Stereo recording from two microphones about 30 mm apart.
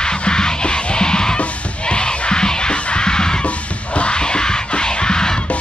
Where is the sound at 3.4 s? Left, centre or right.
Left.